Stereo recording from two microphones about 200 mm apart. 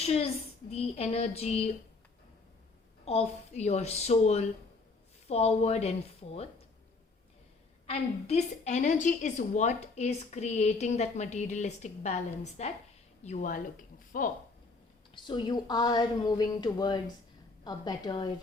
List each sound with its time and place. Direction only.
0.0 s a child's voice: 30° left (ahead or behind)
3.0 s a woman's voice: 30° left (ahead or behind)
7.9 s a woman's voice: 30° left (ahead or behind)
15.1 s a woman's voice: 20° left (ahead or behind)